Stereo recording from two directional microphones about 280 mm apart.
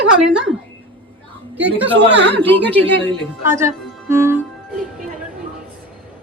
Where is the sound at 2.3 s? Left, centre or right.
Centre.